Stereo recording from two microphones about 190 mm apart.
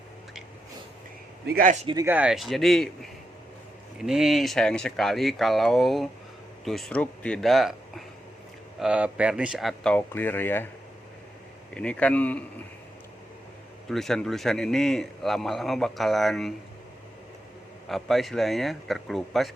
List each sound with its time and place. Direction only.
1.5 s a man's voice: 50° right (ahead or behind)
1.8 s speech: 25° right (ahead or behind)
2.0 s a man's voice: 5° right (ahead or behind); by 10.7 s 10° left (ahead or behind)
11.7 s speech: 5° left (ahead or behind)
13.9 s a man's voice: centre (ahead or behind)
17.8 s a man's voice: centre (ahead or behind)